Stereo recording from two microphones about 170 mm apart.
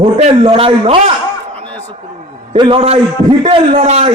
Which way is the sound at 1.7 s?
10° left (ahead or behind).